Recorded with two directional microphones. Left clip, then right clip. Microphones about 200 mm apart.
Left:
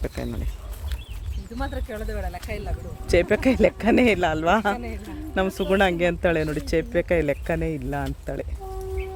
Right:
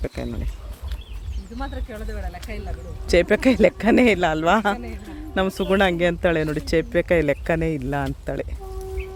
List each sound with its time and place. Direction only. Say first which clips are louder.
0.0 s speech: right 1 dB; 5° right (ahead or behind)
1.5 s speech: left 2 dB; 40° left (ahead or behind)
3.1 s speech: right 2 dB; 20° right (ahead or behind)